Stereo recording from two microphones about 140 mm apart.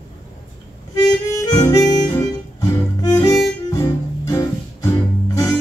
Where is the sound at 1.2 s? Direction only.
25° left (ahead or behind).